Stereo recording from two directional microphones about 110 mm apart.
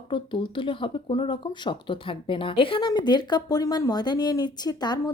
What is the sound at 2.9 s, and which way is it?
A woman's voice, 40° left (ahead or behind).